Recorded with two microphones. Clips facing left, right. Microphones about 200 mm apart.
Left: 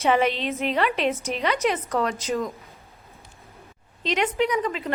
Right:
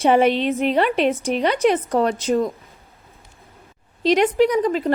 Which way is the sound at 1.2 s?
35° right (ahead or behind).